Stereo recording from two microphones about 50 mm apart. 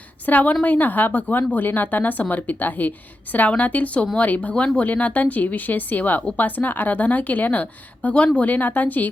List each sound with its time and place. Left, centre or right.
0.3 s a woman's voice: left